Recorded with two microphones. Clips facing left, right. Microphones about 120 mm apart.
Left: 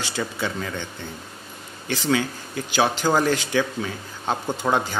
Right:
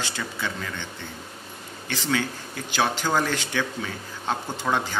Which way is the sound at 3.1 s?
10° left (ahead or behind).